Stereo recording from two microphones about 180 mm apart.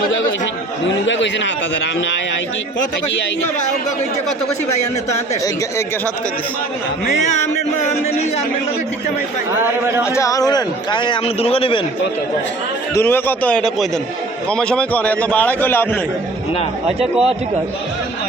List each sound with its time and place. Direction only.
1.0 s a man's voice: 90° left
9.6 s a man's voice: 15° right (ahead or behind)
10.2 s a man's voice: 20° left (ahead or behind)
12.9 s a man's voice: 10° left (ahead or behind)
17.0 s a man's voice: 35° right (ahead or behind)